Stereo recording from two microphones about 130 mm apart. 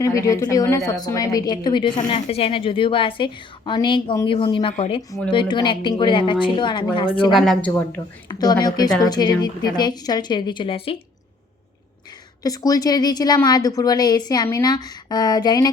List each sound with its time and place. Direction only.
0.0 s speech: 25° left (ahead or behind)
2.0 s a woman's voice: 45° left (ahead or behind)
7.3 s speech: centre (ahead or behind)
8.3 s a woman's voice: 30° left (ahead or behind); by 10.9 s 45° left (ahead or behind)
12.4 s a woman's voice: 30° left (ahead or behind)